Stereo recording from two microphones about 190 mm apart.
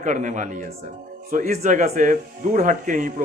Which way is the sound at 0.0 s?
40° right (ahead or behind).